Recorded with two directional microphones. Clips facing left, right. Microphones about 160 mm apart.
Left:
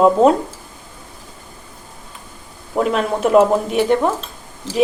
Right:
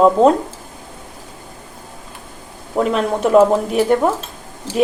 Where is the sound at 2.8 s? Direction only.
Centre (ahead or behind).